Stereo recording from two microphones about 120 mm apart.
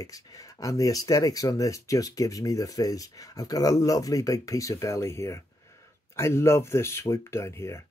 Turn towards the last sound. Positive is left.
turn(degrees=25)  # may be behind; listen again after turning